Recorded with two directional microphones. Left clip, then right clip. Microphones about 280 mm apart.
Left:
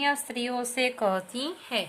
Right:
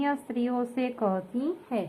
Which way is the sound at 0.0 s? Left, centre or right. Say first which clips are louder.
Left 2 dB; left.